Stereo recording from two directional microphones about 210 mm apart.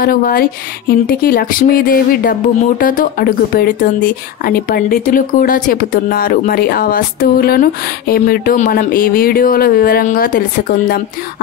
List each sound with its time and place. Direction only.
0.0 s speech: 45° left (ahead or behind)